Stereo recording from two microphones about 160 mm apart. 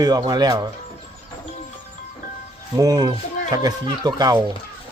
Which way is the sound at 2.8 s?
25° right (ahead or behind).